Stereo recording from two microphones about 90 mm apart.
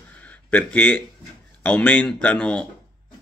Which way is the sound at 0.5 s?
20° left (ahead or behind).